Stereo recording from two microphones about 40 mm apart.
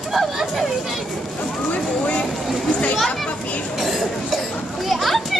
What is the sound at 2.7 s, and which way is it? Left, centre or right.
Children playing, left.